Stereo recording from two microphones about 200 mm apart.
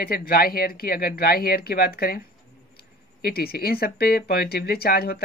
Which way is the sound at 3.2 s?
50° left (ahead or behind).